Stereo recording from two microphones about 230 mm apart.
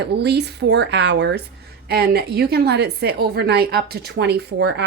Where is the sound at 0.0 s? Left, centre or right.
Right.